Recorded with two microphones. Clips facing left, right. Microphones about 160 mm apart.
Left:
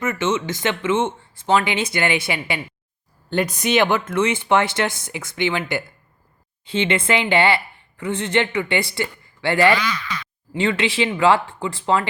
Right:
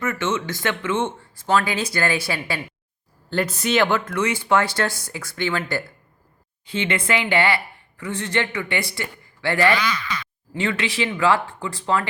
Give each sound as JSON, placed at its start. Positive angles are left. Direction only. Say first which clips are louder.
{"t": 0.0, "sound": "a woman's voice", "louder": "left 2 dB", "side_deg": 20}
{"t": 9.8, "sound": "speech", "louder": "right 1 dB", "side_deg": -15}
{"t": 10.5, "sound": "a woman's voice", "louder": "left 4 dB", "side_deg": 25}